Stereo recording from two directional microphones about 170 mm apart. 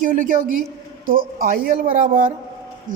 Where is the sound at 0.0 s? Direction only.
50° right (ahead or behind).